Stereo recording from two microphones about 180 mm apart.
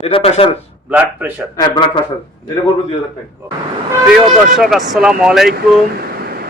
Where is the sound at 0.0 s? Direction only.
35° left (ahead or behind).